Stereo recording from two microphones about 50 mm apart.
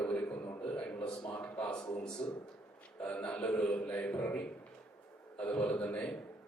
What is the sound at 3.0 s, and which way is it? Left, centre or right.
A man's voice, left.